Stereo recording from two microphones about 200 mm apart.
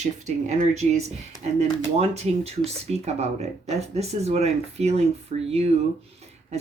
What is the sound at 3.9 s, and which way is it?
Speech, 30° right (ahead or behind).